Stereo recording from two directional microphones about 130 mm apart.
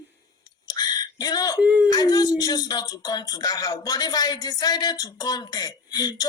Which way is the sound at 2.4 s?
30° left (ahead or behind).